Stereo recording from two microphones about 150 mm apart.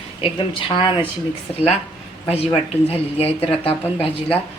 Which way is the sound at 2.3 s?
40° left (ahead or behind).